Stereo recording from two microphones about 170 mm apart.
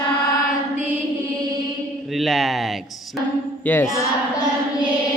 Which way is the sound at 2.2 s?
Centre (ahead or behind).